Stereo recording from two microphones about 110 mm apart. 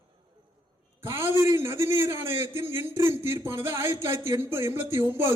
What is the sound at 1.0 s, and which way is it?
A man's voice, 25° right (ahead or behind).